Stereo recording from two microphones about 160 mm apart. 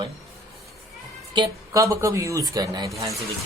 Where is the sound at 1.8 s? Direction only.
20° right (ahead or behind).